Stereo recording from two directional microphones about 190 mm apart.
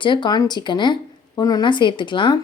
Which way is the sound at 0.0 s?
25° left (ahead or behind).